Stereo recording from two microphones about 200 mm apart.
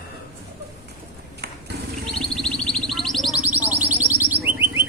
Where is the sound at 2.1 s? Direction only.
Centre (ahead or behind).